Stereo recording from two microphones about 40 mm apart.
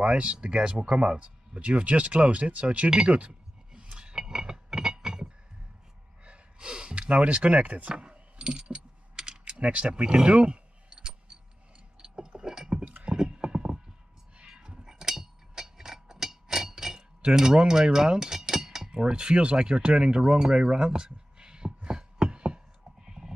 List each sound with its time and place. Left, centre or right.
0.0 s speech: right
3.1 s chink: right
6.2 s speech: right
7.9 s mechanisms: right
9.5 s a sound: right
12.8 s clip-clop: right
13.1 s clip-clop: right
14.4 s a sound: right
17.4 s speech: centre
18.9 s a sound: right